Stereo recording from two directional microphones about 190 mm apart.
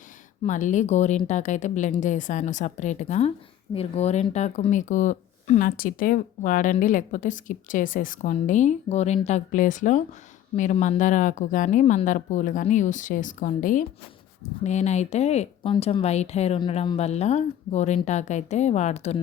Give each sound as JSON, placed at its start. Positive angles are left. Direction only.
{"t": 0.4, "sound": "speech", "side_deg": 40}